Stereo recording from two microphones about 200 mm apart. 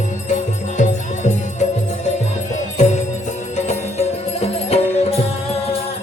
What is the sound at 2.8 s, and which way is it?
Music, 35° left (ahead or behind).